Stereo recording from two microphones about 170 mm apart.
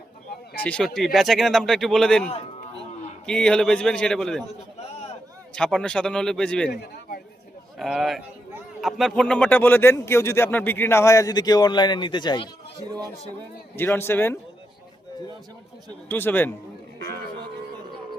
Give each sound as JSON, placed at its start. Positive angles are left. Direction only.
{"t": 0.6, "sound": "a man's voice", "side_deg": 5}
{"t": 5.5, "sound": "a man's voice", "side_deg": 5}
{"t": 7.8, "sound": "a man's voice", "side_deg": 0}
{"t": 12.9, "sound": "a man's voice", "side_deg": -20}
{"t": 13.7, "sound": "speech", "side_deg": 10}
{"t": 16.0, "sound": "speech", "side_deg": 10}